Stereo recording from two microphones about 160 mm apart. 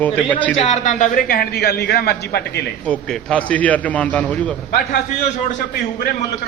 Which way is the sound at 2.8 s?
5° left (ahead or behind).